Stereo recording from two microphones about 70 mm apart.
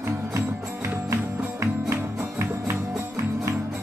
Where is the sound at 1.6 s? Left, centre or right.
Right.